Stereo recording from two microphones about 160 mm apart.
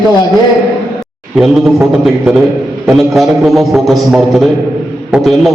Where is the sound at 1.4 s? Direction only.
5° right (ahead or behind).